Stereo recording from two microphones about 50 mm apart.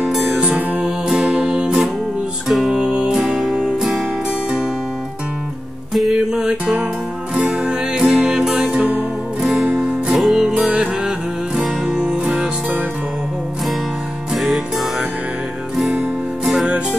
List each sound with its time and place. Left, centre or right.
0.4 s music: centre
2.4 s music: centre
2.8 s music: right
3.1 s music: centre
5.9 s music: centre
9.4 s music: centre
10.1 s music: centre
10.5 s music: centre
14.3 s music: centre